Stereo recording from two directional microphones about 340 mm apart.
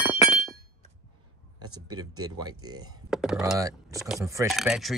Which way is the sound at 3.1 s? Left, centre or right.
Centre.